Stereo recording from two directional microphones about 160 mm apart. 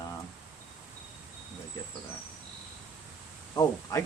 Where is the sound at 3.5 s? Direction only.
20° left (ahead or behind).